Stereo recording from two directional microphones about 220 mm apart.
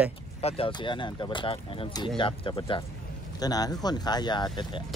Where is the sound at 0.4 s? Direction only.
25° left (ahead or behind).